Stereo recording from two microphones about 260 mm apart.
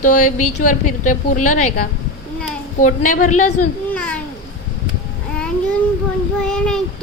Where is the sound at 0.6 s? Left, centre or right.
Left.